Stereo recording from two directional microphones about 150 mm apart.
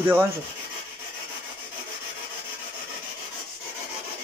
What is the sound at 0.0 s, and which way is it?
Rub, 15° right (ahead or behind).